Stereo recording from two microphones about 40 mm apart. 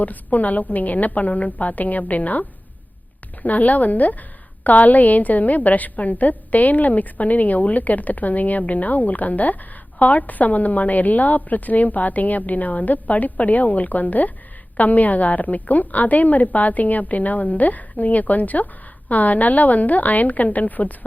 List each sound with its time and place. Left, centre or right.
0.0 s a woman's voice: left
3.4 s a woman's voice: left